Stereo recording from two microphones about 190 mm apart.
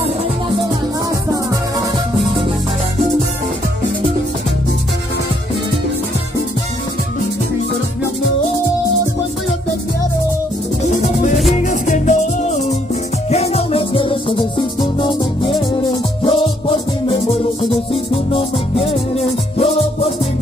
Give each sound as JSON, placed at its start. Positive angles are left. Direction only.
{"t": 1.3, "sound": "music", "side_deg": -15}
{"t": 11.5, "sound": "music", "side_deg": 40}